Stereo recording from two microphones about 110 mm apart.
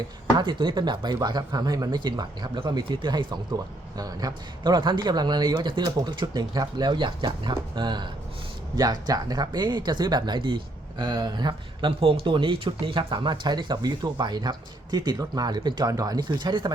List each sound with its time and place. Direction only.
0.3 s speech: 45° right (ahead or behind)
11.9 s speech: 60° right (ahead or behind)